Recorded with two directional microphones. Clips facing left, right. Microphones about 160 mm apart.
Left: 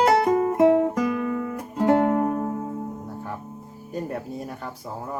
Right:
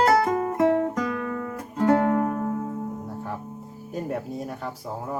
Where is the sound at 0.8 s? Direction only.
5° left (ahead or behind).